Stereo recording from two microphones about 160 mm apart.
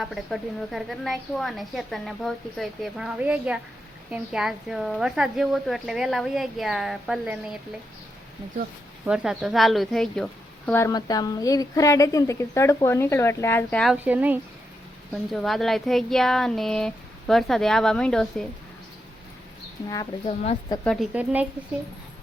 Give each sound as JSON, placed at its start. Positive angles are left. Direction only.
{"t": 0.0, "sound": "a woman's voice", "side_deg": 0}
{"t": 9.0, "sound": "a woman's voice", "side_deg": -5}
{"t": 10.7, "sound": "a woman's voice", "side_deg": 15}
{"t": 13.9, "sound": "speech", "side_deg": -10}
{"t": 15.1, "sound": "a woman's voice", "side_deg": 0}
{"t": 20.2, "sound": "speech", "side_deg": 40}
{"t": 20.8, "sound": "a woman's voice", "side_deg": 0}
{"t": 21.1, "sound": "speech", "side_deg": -10}